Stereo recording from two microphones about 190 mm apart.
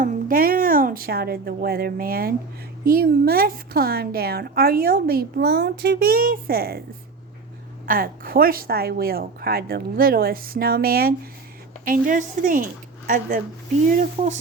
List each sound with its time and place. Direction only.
0.0 s a woman's voice: 50° right (ahead or behind)
7.9 s a woman's voice: 50° right (ahead or behind)
14.2 s speech: 25° right (ahead or behind)